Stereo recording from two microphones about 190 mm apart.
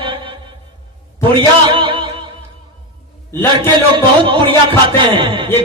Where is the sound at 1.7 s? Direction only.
25° right (ahead or behind).